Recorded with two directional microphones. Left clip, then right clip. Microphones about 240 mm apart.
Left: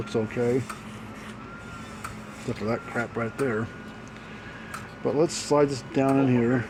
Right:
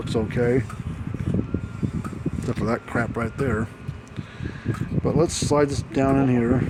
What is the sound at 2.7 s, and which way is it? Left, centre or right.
Speech, right.